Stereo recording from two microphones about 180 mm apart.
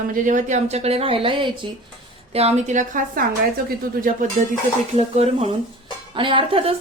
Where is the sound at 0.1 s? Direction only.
45° right (ahead or behind).